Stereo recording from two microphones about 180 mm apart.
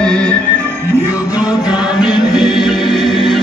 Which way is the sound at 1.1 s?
20° left (ahead or behind).